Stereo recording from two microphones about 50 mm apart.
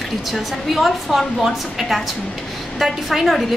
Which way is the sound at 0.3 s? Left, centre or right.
Centre.